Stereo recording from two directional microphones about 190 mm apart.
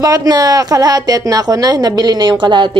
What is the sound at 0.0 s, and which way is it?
A woman's voice, 20° right (ahead or behind).